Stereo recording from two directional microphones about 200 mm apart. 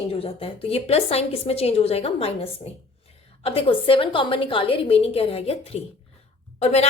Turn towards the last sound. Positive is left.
turn(degrees=35)  # may be behind; listen again after turning